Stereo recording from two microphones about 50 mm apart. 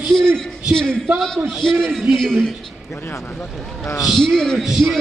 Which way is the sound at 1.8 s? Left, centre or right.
Centre.